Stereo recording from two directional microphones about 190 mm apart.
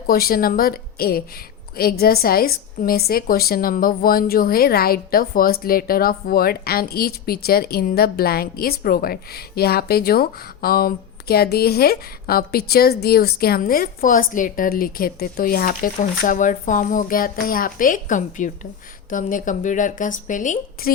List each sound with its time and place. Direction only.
0.1 s a woman's voice: 50° left (ahead or behind)